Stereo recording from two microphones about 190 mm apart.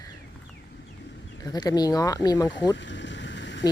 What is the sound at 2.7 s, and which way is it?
Vehicle, 70° left (ahead or behind).